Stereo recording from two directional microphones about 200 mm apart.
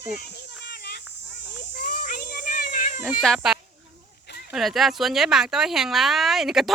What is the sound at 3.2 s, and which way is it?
Speech, centre (ahead or behind).